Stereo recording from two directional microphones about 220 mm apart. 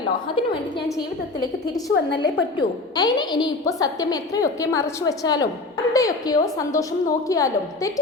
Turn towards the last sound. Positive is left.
turn(degrees=15)  # may be behind; listen again after turning